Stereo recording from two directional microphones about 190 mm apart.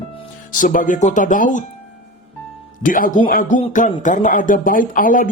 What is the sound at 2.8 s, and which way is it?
Speech, 45° left (ahead or behind).